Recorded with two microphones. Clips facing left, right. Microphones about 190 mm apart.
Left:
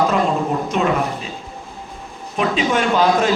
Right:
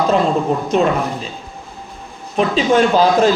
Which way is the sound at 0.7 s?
35° right (ahead or behind).